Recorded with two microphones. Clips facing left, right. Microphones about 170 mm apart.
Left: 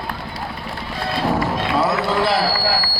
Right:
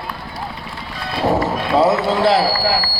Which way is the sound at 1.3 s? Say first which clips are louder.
Right 5 dB; 20° right (ahead or behind).